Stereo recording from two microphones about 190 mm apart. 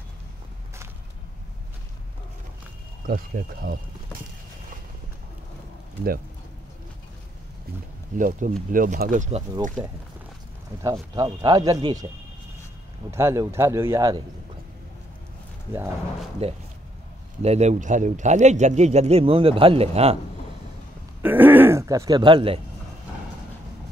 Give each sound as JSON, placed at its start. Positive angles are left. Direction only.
{"t": 3.1, "sound": "speech", "side_deg": -50}
{"t": 8.2, "sound": "speech", "side_deg": -45}
{"t": 10.8, "sound": "speech", "side_deg": -15}
{"t": 13.1, "sound": "speech", "side_deg": -15}
{"t": 16.4, "sound": "speech", "side_deg": -30}
{"t": 21.2, "sound": "speech", "side_deg": -10}